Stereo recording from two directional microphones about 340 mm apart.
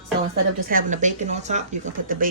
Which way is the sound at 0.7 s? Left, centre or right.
Right.